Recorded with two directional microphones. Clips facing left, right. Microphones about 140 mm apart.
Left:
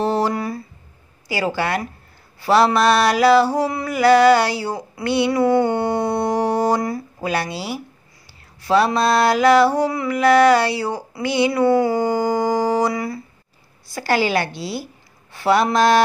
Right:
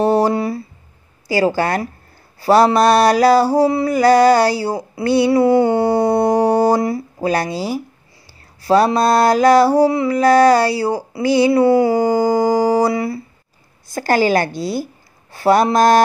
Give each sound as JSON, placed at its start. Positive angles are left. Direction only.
{"t": 0.0, "sound": "a sound", "side_deg": -40}
{"t": 1.3, "sound": "mantra", "side_deg": -40}
{"t": 11.7, "sound": "humming", "side_deg": -35}
{"t": 13.8, "sound": "a woman's voice", "side_deg": -45}